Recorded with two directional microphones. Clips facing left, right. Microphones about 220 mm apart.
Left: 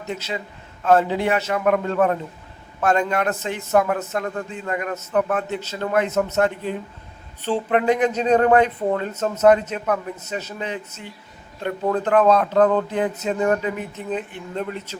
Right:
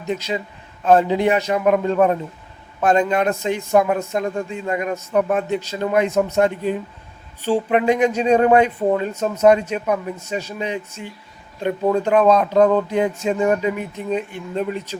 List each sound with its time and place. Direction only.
0.1 s a man's voice: 15° right (ahead or behind)